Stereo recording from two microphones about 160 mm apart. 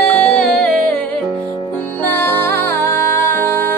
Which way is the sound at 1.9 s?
15° left (ahead or behind).